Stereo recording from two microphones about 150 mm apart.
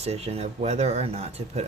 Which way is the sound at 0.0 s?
45° right (ahead or behind).